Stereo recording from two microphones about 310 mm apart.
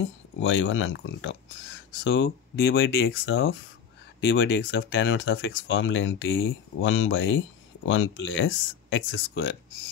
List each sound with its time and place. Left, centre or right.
0.4 s speech: left